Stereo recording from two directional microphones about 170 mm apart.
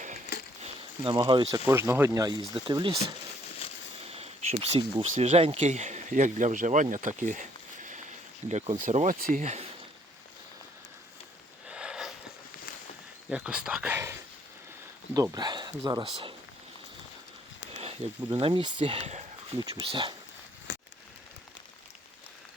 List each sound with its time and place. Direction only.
0.6 s speech: 30° right (ahead or behind)
1.6 s speech: 15° right (ahead or behind)
2.6 s speech: 30° right (ahead or behind)
4.0 s speech: 35° right (ahead or behind)
8.4 s speech: 40° right (ahead or behind)
11.7 s a sound: 5° right (ahead or behind)
13.3 s speech: 5° right (ahead or behind); by 16.3 s 25° right (ahead or behind)
17.7 s speech: 35° right (ahead or behind)
20.7 s a sound: 90° left